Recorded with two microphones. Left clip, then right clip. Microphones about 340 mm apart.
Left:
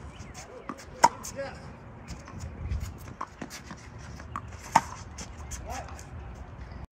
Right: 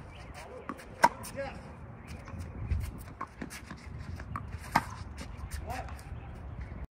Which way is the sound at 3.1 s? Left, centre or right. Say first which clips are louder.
Left 3 dB; centre.